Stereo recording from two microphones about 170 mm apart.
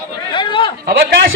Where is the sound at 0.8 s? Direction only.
60° right (ahead or behind).